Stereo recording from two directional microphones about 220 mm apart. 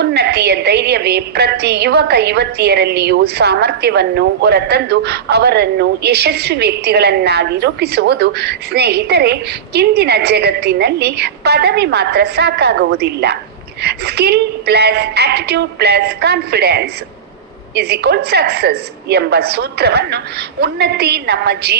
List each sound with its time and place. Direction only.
0.0 s a woman's voice: 50° right (ahead or behind)